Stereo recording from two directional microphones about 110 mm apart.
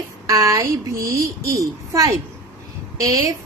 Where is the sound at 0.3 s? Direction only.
30° right (ahead or behind).